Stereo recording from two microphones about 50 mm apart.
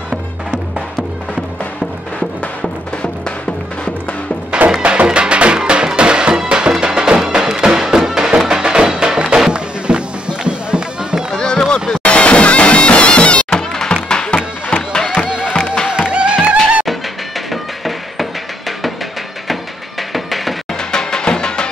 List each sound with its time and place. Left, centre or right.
2.1 s music: left
4.5 s music: right
11.3 s a sound: centre
12.0 s music: left
15.2 s music: centre
17.5 s a sound: centre
20.9 s music: centre